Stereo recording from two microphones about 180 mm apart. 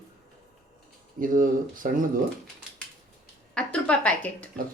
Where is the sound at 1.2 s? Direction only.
50° right (ahead or behind).